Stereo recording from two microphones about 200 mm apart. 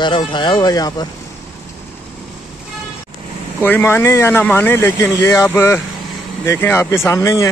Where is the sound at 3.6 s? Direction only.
10° left (ahead or behind).